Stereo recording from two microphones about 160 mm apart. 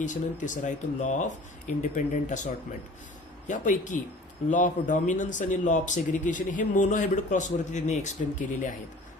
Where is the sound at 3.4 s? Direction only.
55° left (ahead or behind).